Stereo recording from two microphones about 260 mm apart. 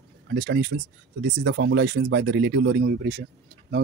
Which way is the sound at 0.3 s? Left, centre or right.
Right.